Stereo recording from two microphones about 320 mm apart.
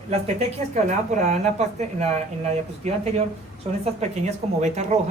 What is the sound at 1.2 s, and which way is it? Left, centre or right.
A woman's voice, right.